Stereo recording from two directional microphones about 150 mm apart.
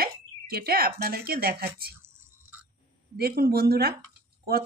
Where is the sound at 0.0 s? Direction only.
90° right.